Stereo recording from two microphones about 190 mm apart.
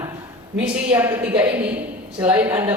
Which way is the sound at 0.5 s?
5° right (ahead or behind).